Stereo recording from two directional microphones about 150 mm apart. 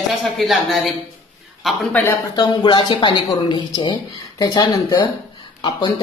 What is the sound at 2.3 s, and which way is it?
Speech, 30° left (ahead or behind).